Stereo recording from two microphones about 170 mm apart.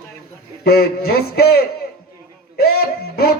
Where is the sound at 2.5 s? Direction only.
65° left (ahead or behind).